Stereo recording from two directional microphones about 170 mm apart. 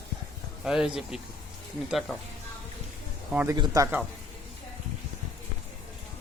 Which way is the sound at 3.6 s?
20° right (ahead or behind).